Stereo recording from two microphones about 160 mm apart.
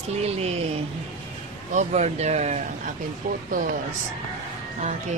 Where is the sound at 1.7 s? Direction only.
45° right (ahead or behind).